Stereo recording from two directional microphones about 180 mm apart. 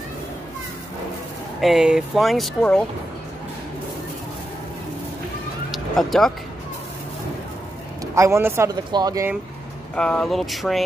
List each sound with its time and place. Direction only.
1.6 s speech: centre (ahead or behind)
5.7 s vehicle: centre (ahead or behind)
8.0 s speech: 15° right (ahead or behind)
9.9 s speech: 5° left (ahead or behind)